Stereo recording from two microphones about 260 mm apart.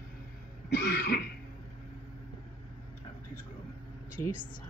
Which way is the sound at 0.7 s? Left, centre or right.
Left.